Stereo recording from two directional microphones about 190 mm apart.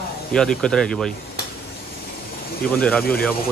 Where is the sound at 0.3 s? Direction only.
5° left (ahead or behind).